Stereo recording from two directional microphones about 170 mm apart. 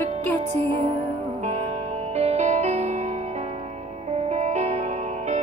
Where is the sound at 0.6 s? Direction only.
35° right (ahead or behind).